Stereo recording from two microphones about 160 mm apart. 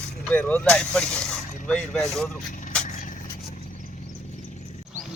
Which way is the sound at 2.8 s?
50° left (ahead or behind).